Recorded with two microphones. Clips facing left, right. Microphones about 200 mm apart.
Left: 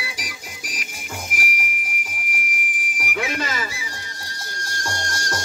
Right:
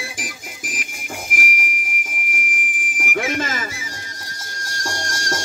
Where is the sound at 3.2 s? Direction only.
50° right (ahead or behind).